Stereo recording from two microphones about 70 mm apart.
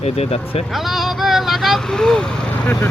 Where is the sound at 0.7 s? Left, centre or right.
Centre.